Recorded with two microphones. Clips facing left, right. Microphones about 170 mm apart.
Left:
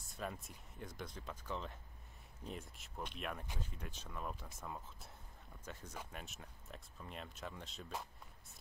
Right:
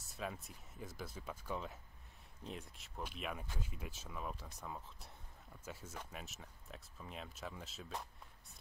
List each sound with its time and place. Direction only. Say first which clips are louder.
0.1 s speech: even; centre (ahead or behind)